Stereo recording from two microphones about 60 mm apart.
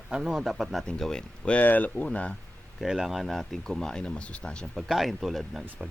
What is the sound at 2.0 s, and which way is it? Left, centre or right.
Speech, centre.